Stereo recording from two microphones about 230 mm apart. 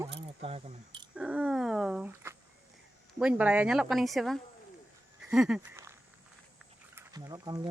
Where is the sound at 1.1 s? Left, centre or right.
Centre.